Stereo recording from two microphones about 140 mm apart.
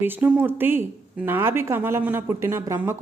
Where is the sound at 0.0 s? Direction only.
15° right (ahead or behind).